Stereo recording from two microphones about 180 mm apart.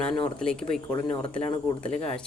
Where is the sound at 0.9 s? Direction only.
30° left (ahead or behind).